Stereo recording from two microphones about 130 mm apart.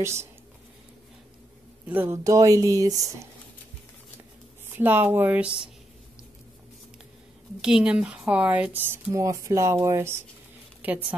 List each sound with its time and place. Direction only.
0.0 s music: 20° right (ahead or behind)
1.9 s speech: 15° right (ahead or behind)
2.2 s music: 25° right (ahead or behind)
4.7 s speech: 15° right (ahead or behind)
7.6 s a woman's voice: 5° right (ahead or behind)